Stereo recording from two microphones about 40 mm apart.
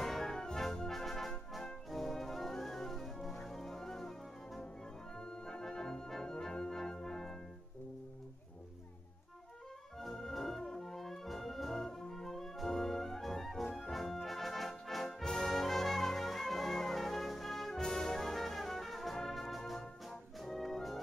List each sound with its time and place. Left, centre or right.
0.0 s music: centre
9.9 s music: centre
13.7 s brass instrument: centre